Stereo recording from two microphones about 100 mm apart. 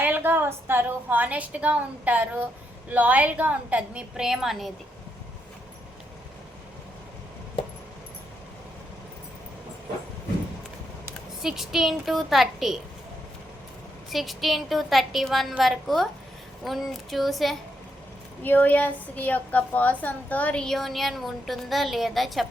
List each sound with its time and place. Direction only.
0.0 s a woman's voice: 20° right (ahead or behind); by 4.7 s 5° right (ahead or behind)
11.4 s a woman's voice: 5° right (ahead or behind)
14.1 s a woman's voice: centre (ahead or behind)
18.4 s a woman's voice: 20° left (ahead or behind); by 22.4 s centre (ahead or behind)